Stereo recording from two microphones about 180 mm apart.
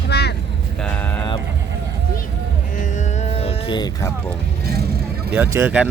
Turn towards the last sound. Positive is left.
turn(degrees=-10)  # may be behind; listen again after turning